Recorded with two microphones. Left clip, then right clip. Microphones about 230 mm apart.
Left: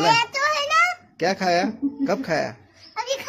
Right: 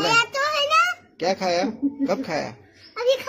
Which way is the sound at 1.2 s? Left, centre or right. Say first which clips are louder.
Left 2 dB; left.